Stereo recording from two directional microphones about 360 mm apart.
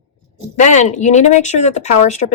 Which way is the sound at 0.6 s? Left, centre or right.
Centre.